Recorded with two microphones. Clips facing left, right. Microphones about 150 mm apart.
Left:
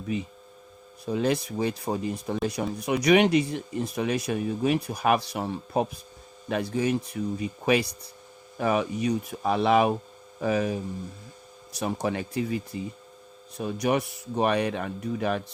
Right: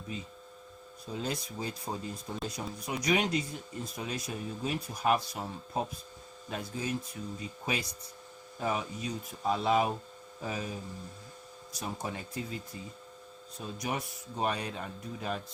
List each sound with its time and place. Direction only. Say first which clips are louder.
0.1 s speech: left 10 dB; 75° left (ahead or behind)